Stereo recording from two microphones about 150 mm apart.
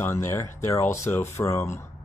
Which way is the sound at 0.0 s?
20° left (ahead or behind).